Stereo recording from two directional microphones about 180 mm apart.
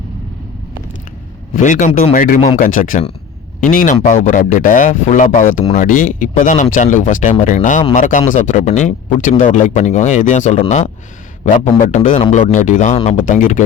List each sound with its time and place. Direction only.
1.5 s speech: 45° left (ahead or behind)
12.1 s speech: 30° left (ahead or behind)
12.4 s speech: 45° left (ahead or behind)